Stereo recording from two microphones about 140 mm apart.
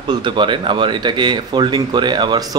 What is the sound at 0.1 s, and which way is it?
Speech, 35° right (ahead or behind).